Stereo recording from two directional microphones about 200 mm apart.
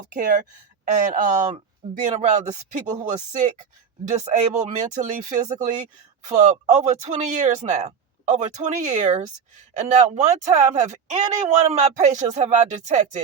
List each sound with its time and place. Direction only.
0.1 s a woman's voice: 45° right (ahead or behind)
1.8 s a man's voice: 30° right (ahead or behind)